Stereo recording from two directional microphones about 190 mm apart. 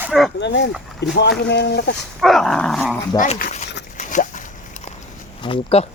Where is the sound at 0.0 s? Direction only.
5° right (ahead or behind).